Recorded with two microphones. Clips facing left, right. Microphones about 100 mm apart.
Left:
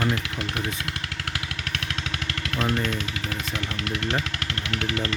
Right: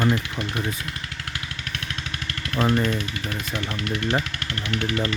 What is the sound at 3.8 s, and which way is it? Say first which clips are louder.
Speech: right 3 dB; 90° left.